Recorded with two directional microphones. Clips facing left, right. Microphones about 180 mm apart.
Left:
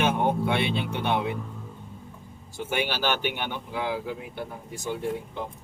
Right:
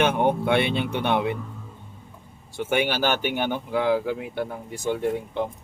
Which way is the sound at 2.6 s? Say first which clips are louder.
Right 4 dB; 55° right (ahead or behind).